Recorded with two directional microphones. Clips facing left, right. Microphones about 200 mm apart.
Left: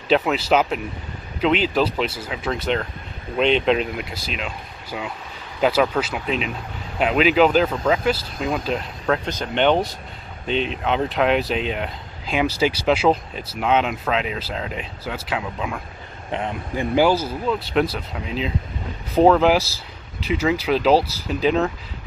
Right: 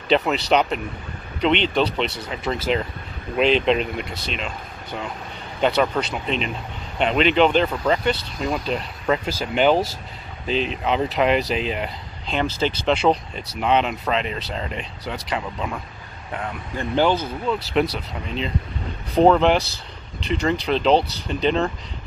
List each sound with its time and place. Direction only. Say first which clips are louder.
0.1 s speech: left 1 dB; centre (ahead or behind)
16.3 s speech: left 4 dB; 25° left (ahead or behind)
16.7 s speech: left 2 dB; 10° left (ahead or behind)